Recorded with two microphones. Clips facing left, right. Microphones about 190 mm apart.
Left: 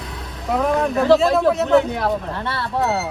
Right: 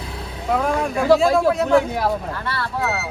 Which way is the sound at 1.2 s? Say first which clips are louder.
Even; centre (ahead or behind).